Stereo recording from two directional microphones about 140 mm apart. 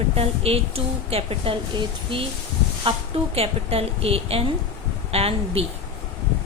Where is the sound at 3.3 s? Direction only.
45° right (ahead or behind).